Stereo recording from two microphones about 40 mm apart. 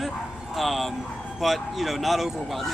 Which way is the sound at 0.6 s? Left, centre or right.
Centre.